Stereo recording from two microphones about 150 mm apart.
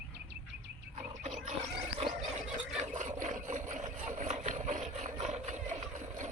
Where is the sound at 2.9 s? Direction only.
55° right (ahead or behind).